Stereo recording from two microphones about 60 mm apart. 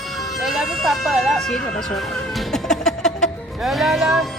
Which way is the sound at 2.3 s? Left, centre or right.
Centre.